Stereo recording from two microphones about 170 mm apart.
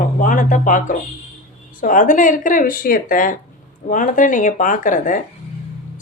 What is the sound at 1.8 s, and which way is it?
A woman's voice, 50° left (ahead or behind).